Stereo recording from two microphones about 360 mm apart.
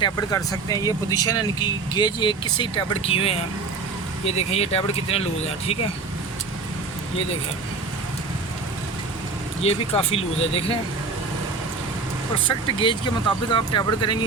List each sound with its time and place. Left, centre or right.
0.0 s speech: centre
9.6 s speech: centre
12.5 s speech: centre